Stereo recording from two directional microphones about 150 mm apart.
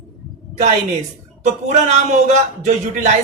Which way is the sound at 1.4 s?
50° right (ahead or behind).